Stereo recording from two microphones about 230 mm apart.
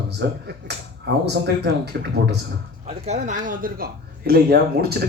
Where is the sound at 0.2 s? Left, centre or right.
Right.